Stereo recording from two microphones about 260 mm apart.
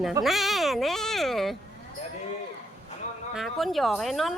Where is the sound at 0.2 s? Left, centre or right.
Centre.